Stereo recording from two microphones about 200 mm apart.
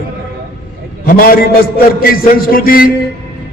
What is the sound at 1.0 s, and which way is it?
A man's voice, 45° left (ahead or behind).